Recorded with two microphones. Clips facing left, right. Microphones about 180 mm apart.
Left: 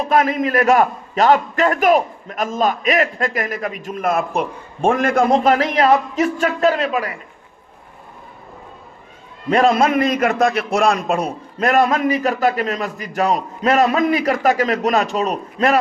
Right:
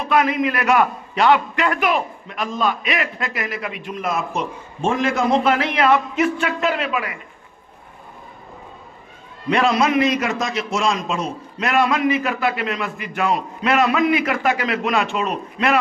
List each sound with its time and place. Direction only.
0.0 s a man's voice: 45° left (ahead or behind)
9.5 s a man's voice: 45° left (ahead or behind); by 11.3 s 60° left (ahead or behind)
11.6 s a man's voice: 45° left (ahead or behind)